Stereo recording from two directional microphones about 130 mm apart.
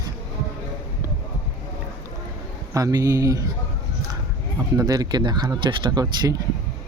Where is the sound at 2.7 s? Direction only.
25° right (ahead or behind).